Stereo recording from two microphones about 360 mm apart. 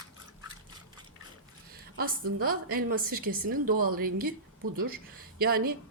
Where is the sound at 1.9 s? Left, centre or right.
Right.